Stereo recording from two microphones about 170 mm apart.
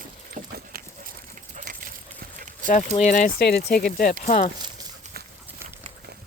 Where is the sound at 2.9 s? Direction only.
45° left (ahead or behind).